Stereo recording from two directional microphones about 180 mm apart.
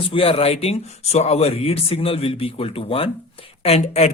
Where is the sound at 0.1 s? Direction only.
30° left (ahead or behind).